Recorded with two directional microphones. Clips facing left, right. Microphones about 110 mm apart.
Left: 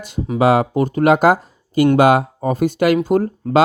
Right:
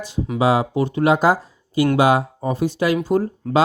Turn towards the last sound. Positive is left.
turn(degrees=60)  # may be behind; listen again after turning